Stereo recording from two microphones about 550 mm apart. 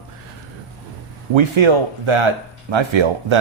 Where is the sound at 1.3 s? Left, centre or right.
Right.